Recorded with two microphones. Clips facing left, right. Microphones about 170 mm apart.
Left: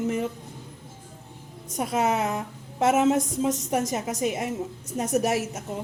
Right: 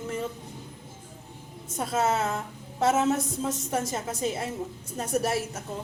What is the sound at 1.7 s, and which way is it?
A woman's voice, 15° left (ahead or behind).